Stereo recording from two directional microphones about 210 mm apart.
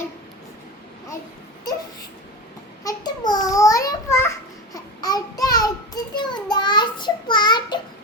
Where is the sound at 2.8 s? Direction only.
20° left (ahead or behind).